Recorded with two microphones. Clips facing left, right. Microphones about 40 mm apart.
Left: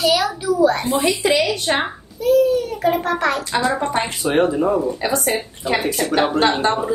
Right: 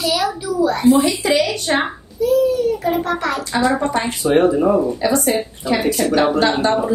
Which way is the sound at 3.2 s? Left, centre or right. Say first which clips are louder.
Even; left.